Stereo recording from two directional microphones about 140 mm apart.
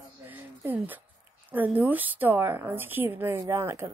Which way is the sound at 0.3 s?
15° right (ahead or behind).